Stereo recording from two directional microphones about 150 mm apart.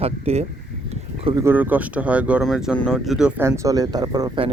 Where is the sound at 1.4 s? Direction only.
15° right (ahead or behind).